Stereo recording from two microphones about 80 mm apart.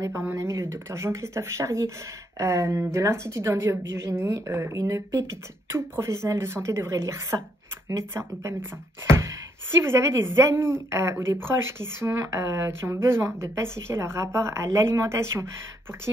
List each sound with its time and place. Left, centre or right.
0.3 s speech: right